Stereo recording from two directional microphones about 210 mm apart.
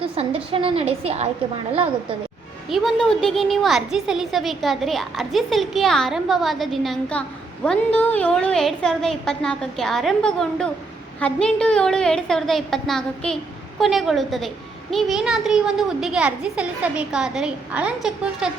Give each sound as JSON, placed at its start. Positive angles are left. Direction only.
{"t": 0.0, "sound": "a woman's voice", "side_deg": -25}
{"t": 2.6, "sound": "a child's voice", "side_deg": 0}